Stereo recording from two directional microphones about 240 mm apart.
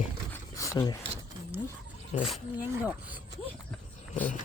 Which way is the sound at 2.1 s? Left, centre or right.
Left.